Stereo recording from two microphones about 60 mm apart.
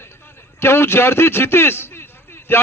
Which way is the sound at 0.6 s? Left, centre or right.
Left.